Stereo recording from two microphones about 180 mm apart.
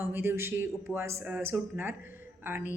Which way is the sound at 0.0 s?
10° right (ahead or behind).